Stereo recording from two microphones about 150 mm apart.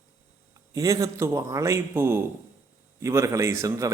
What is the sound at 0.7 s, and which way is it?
A man's voice, 25° right (ahead or behind).